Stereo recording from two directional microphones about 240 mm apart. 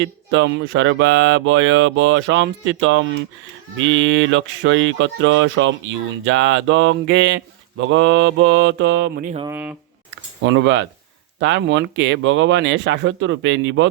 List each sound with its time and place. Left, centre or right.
0.0 s speech: right
9.5 s speech: centre
10.4 s speech: right